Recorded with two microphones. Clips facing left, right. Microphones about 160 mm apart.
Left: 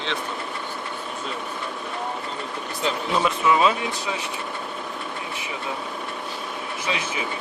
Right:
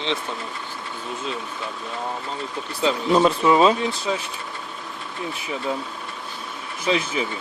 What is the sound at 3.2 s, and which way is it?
Speech, 35° right (ahead or behind).